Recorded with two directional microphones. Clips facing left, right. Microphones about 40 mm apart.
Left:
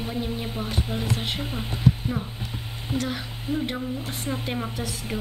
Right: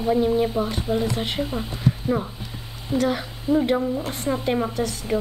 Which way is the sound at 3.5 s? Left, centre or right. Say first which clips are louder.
Right 8 dB; left.